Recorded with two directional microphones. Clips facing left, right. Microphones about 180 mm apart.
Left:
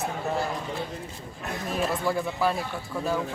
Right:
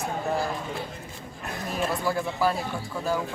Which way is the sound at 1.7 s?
Centre (ahead or behind).